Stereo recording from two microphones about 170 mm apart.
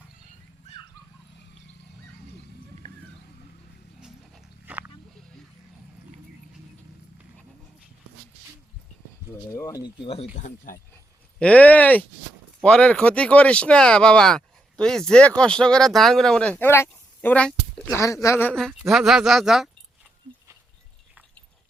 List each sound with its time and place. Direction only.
4.0 s dog: 5° right (ahead or behind)
9.5 s speech: 20° left (ahead or behind)
10.3 s speech: 45° left (ahead or behind)
11.3 s speech: 10° left (ahead or behind)